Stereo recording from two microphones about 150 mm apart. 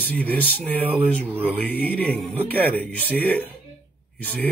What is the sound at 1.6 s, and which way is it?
Speech, 10° left (ahead or behind).